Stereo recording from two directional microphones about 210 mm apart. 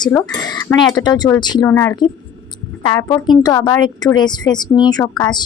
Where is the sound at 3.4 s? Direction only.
15° left (ahead or behind).